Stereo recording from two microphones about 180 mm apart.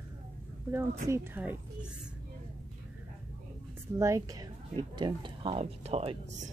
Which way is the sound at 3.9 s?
15° right (ahead or behind).